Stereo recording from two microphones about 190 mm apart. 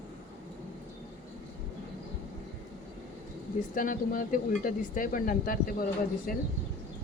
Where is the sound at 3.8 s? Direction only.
45° left (ahead or behind).